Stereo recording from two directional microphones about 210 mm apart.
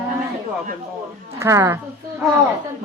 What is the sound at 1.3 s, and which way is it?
Speech, 15° right (ahead or behind).